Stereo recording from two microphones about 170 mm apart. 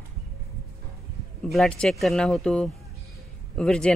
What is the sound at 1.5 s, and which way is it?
Speech, 5° left (ahead or behind).